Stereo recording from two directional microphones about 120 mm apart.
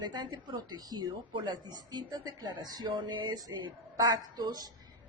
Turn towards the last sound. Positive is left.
turn(degrees=-35)  # may be behind; listen again after turning